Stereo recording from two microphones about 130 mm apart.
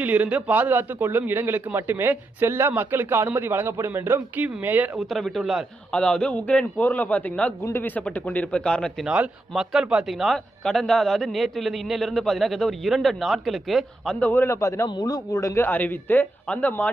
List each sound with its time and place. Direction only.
0.0 s a man's voice: 10° right (ahead or behind)
4.9 s a man's voice: centre (ahead or behind)
9.0 s a man's voice: 10° right (ahead or behind)
14.2 s a man's voice: 15° left (ahead or behind)
14.9 s a man's voice: 35° left (ahead or behind); by 16.9 s 10° left (ahead or behind)